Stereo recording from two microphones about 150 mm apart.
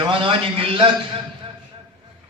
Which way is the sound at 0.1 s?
35° right (ahead or behind).